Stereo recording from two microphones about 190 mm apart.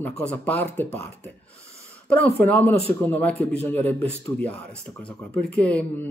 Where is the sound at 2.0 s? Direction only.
5° left (ahead or behind).